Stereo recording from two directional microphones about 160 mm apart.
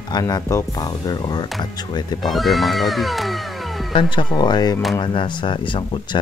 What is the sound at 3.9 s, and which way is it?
Speech, 30° left (ahead or behind).